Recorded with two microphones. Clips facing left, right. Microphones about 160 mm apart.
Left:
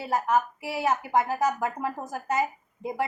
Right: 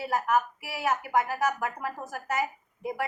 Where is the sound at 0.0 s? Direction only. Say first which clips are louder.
Left 1 dB; 25° left (ahead or behind).